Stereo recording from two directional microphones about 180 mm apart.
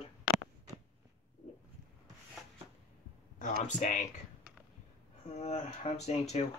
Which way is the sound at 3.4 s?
45° left (ahead or behind).